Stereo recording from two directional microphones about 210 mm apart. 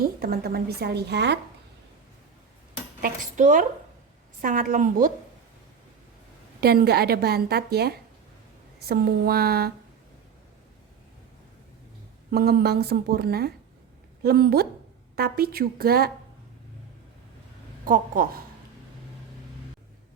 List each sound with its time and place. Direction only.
0.0 s a woman's voice: 45° right (ahead or behind)
3.0 s a woman's voice: 35° right (ahead or behind)
6.6 s a woman's voice: 50° right (ahead or behind)
12.3 s a woman's voice: 45° right (ahead or behind)
17.8 s a woman's voice: 40° right (ahead or behind)